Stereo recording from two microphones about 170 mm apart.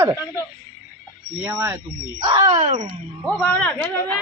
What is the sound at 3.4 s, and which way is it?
Speech, 10° left (ahead or behind).